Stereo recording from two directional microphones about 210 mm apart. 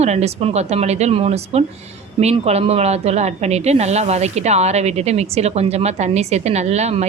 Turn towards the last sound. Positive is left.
turn(degrees=-30)  # may be behind; listen again after turning